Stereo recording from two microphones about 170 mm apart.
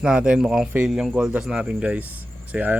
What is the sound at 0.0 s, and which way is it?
A man's voice, 5° right (ahead or behind).